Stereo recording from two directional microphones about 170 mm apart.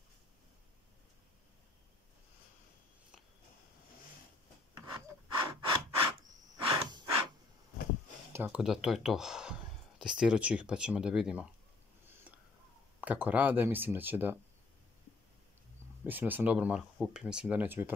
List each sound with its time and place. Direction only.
4.7 s wood: 25° right (ahead or behind)
6.6 s breathing: 30° right (ahead or behind)
8.3 s speech: 10° right (ahead or behind)
13.0 s speech: 10° right (ahead or behind)
16.1 s speech: 10° right (ahead or behind)